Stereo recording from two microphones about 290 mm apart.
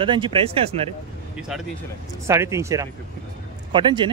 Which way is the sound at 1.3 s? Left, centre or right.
Centre.